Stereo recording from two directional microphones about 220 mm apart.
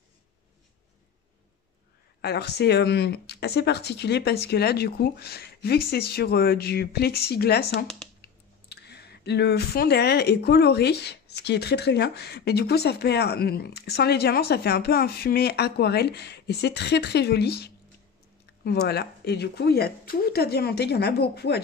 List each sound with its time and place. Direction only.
2.2 s speech: 50° left (ahead or behind)
7.8 s speech: 5° left (ahead or behind)
8.2 s speech: 50° left (ahead or behind)